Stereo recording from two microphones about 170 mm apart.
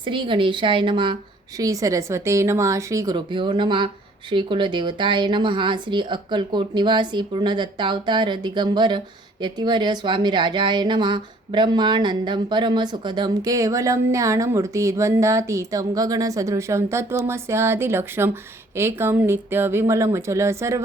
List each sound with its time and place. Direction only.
0.0 s speech: 30° right (ahead or behind)